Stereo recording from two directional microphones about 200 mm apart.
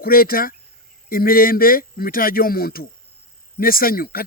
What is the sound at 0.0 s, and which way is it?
Speech, 45° left (ahead or behind).